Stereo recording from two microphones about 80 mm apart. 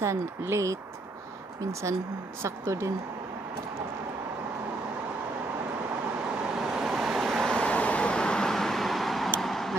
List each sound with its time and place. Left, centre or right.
0.0 s speech: right
6.2 s vehicle: centre
7.4 s vehicle: centre